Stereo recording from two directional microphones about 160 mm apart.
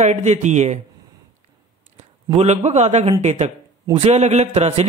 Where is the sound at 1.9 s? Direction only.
40° right (ahead or behind).